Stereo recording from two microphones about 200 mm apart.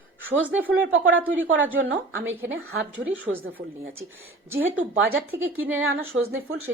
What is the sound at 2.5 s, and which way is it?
Speech, 75° right (ahead or behind).